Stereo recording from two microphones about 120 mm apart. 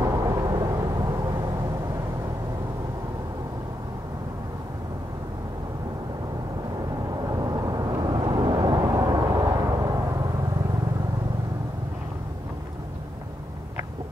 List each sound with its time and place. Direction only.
0.0 s vehicle: 30° right (ahead or behind)
7.2 s vehicle: 30° right (ahead or behind)